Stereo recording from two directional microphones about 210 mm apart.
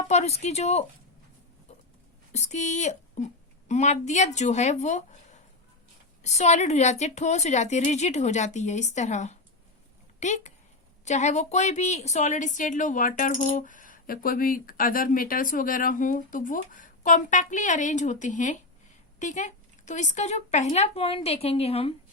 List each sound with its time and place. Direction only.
0.1 s a woman's voice: 30° left (ahead or behind)
2.3 s a woman's voice: 35° left (ahead or behind)
6.2 s a woman's voice: 30° left (ahead or behind)